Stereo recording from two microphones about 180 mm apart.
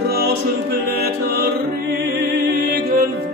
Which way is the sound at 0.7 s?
60° right (ahead or behind).